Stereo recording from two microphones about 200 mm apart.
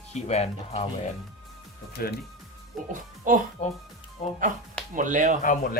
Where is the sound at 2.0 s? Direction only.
50° left (ahead or behind).